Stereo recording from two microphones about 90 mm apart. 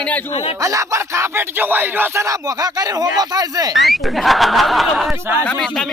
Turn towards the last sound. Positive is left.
turn(degrees=0)  # may be behind; listen again after turning